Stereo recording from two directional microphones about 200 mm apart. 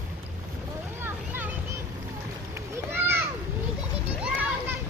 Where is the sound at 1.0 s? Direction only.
10° right (ahead or behind).